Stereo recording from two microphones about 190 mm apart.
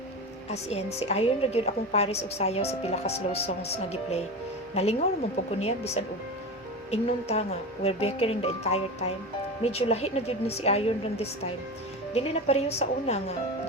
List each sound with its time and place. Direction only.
0.5 s a woman's voice: 35° left (ahead or behind)
4.7 s a woman's voice: 35° left (ahead or behind)